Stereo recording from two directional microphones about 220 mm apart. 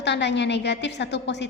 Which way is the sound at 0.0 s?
50° left (ahead or behind).